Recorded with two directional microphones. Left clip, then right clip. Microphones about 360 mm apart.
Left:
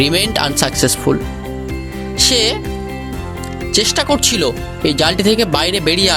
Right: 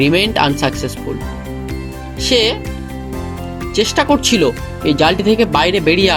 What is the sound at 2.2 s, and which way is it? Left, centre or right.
Speech, left.